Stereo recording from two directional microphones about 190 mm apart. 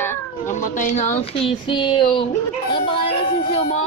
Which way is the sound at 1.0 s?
25° left (ahead or behind).